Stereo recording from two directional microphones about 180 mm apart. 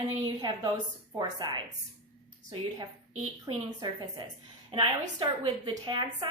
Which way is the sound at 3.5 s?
25° right (ahead or behind).